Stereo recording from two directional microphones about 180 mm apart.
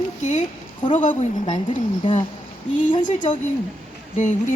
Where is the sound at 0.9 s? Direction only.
45° left (ahead or behind).